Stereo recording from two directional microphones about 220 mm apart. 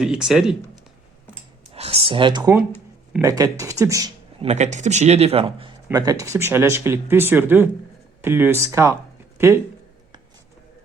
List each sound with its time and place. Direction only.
0.0 s speech: 5° right (ahead or behind)
1.7 s speech: 25° right (ahead or behind)
4.4 s speech: 30° right (ahead or behind); by 9.0 s 10° right (ahead or behind)